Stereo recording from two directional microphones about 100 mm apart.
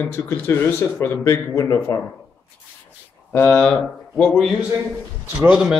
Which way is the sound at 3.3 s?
15° left (ahead or behind).